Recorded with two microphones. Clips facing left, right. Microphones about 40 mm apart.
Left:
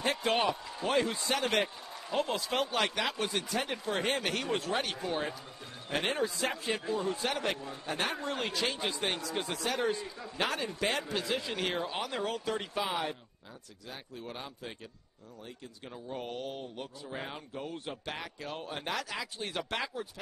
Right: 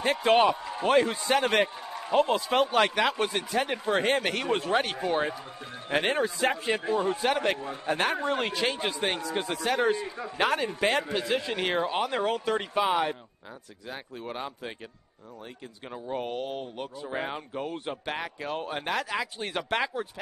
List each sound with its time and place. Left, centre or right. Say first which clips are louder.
0.2 s speech: right 8 dB; right
15.9 s speech: right 7 dB; right